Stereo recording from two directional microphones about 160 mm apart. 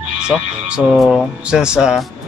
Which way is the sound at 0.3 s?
Centre (ahead or behind).